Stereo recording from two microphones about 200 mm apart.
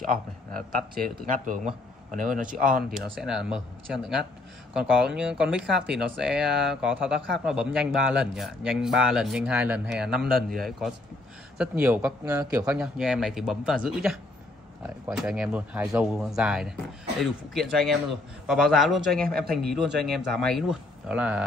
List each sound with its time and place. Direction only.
0.0 s speech: 45° right (ahead or behind)
3.2 s speech: 5° right (ahead or behind)
19.2 s speech: 50° right (ahead or behind)
20.1 s speech: centre (ahead or behind)